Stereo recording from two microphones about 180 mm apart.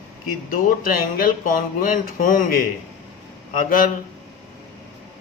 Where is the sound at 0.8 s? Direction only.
55° left (ahead or behind).